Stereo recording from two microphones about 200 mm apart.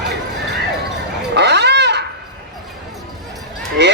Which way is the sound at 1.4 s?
60° right (ahead or behind).